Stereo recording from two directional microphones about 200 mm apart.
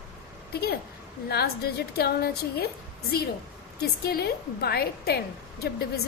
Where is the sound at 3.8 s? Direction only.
50° left (ahead or behind).